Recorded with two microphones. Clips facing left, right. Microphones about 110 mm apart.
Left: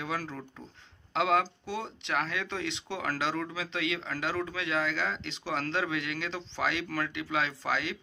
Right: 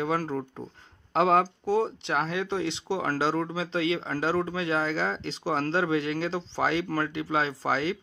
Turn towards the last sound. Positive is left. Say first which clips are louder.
# right 5 dB
turn(degrees=-35)  # may be behind; listen again after turning